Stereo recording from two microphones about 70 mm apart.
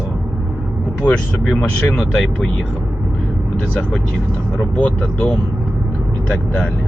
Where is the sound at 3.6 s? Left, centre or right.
Centre.